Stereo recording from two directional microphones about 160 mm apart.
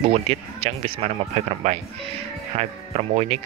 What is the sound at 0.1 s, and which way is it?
Speech, 40° right (ahead or behind).